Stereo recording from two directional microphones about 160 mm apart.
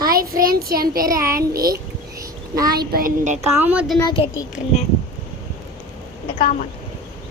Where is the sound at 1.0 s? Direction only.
20° right (ahead or behind).